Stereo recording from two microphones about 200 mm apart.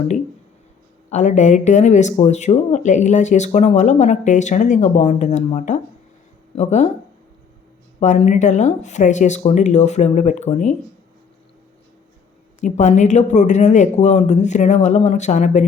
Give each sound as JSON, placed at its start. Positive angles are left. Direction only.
{"t": 1.1, "sound": "speech", "side_deg": 35}
{"t": 7.9, "sound": "speech", "side_deg": 35}
{"t": 12.6, "sound": "speech", "side_deg": 35}